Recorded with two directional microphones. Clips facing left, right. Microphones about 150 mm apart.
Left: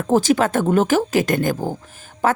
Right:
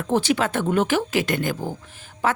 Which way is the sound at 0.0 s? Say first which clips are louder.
Left 5 dB; 40° left (ahead or behind).